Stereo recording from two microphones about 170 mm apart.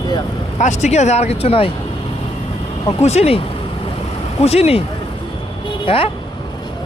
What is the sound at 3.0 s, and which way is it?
Speech, 40° left (ahead or behind).